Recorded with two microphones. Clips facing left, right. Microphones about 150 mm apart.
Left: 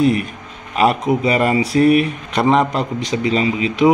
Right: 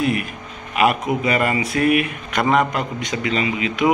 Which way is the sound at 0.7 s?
30° left (ahead or behind).